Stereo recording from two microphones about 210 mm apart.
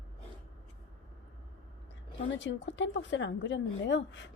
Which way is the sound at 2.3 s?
60° left (ahead or behind).